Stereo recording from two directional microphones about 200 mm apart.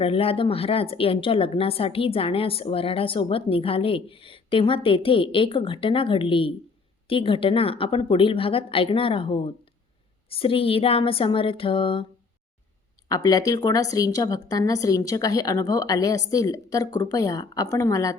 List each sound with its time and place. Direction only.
0.0 s a woman's voice: 30° left (ahead or behind)
13.1 s a woman's voice: 20° left (ahead or behind)